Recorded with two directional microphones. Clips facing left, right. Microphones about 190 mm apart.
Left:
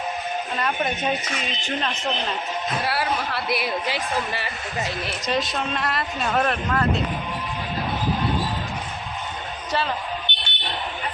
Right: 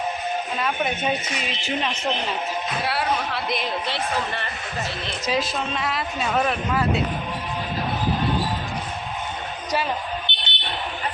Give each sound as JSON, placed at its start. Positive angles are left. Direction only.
{"t": 0.6, "sound": "speech", "side_deg": 0}
{"t": 5.2, "sound": "speech", "side_deg": 0}
{"t": 10.3, "sound": "a sound", "side_deg": 15}